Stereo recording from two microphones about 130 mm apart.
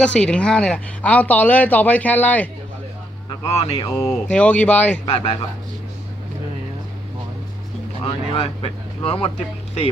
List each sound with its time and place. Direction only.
0.0 s speech: 10° left (ahead or behind)
3.2 s speech: 45° left (ahead or behind)
4.3 s speech: 10° left (ahead or behind)
5.0 s speech: 45° left (ahead or behind)
8.0 s speech: 45° left (ahead or behind)